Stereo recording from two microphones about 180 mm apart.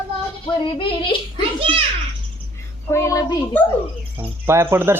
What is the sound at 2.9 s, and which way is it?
Child singing, 15° left (ahead or behind).